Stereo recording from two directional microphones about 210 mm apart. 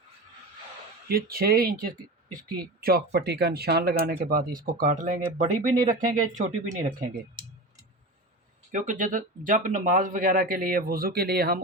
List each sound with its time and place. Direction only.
1.0 s speech: 45° right (ahead or behind)
8.7 s speech: 35° right (ahead or behind)